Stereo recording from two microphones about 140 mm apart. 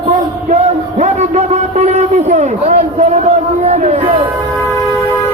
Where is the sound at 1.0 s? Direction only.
55° right (ahead or behind).